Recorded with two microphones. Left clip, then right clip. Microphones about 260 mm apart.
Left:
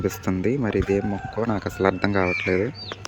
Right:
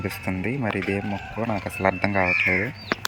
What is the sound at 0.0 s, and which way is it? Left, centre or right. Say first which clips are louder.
Speech: left 4 dB; centre.